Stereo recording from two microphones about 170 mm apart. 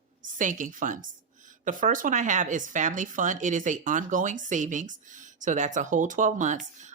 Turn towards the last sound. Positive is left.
turn(degrees=-45)  # may be behind; listen again after turning